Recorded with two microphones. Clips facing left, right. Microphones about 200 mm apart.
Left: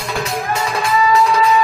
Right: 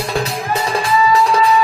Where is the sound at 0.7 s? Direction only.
30° right (ahead or behind).